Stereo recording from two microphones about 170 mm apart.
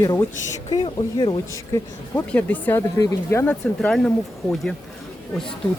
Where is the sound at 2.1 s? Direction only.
10° left (ahead or behind).